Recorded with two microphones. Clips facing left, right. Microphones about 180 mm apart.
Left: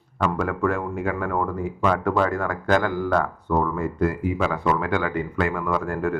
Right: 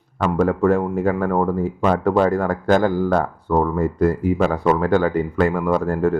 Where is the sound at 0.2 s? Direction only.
35° right (ahead or behind).